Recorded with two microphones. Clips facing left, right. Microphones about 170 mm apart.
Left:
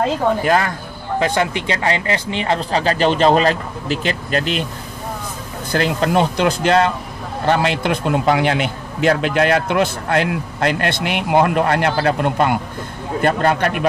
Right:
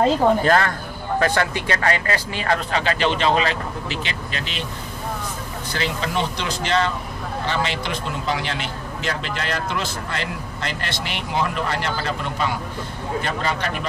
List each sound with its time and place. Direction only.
0.4 s speech: 15° left (ahead or behind)
2.7 s speech: 35° left (ahead or behind)
5.7 s a man's voice: 50° left (ahead or behind)